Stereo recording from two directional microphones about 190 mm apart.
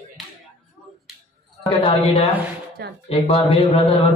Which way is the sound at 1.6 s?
25° left (ahead or behind).